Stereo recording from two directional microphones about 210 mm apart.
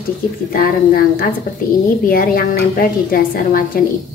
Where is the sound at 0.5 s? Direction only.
45° left (ahead or behind).